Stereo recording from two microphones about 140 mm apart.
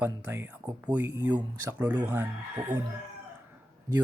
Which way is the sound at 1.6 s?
15° right (ahead or behind).